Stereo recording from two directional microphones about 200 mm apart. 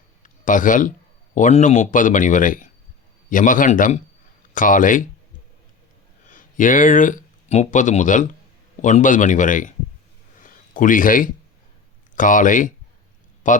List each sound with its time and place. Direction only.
0.2 s speech: 40° left (ahead or behind)
6.2 s speech: 40° left (ahead or behind)
10.4 s a sound: 40° left (ahead or behind)
12.1 s speech: 40° left (ahead or behind)